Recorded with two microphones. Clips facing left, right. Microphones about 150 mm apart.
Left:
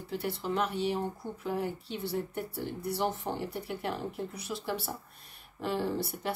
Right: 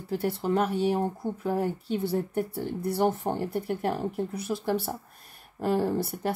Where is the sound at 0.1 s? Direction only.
50° right (ahead or behind).